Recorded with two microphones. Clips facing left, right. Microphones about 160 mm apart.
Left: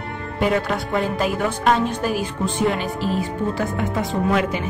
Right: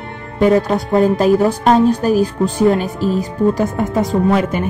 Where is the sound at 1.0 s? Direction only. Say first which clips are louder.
Right 11 dB; 40° right (ahead or behind).